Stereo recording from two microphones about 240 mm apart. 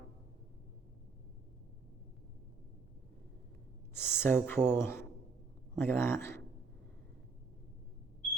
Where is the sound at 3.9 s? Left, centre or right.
Centre.